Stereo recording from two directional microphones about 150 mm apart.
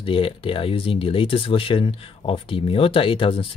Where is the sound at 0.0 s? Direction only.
35° left (ahead or behind).